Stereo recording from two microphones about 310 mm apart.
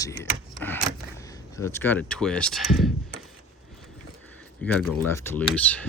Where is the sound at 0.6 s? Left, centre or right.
Centre.